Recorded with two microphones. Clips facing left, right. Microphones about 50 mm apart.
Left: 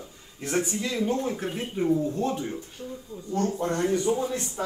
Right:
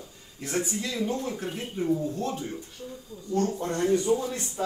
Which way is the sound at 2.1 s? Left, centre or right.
Left.